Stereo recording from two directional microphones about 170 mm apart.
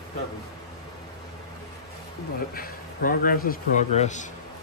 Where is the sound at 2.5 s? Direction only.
60° left (ahead or behind).